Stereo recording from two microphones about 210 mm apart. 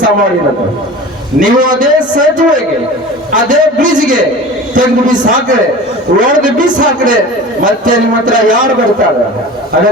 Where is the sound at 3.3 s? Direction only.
40° right (ahead or behind).